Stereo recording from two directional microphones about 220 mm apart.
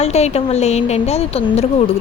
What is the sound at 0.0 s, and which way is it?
Speech, 30° left (ahead or behind).